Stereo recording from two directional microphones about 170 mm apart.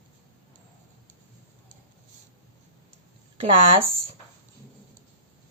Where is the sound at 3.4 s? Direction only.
35° right (ahead or behind).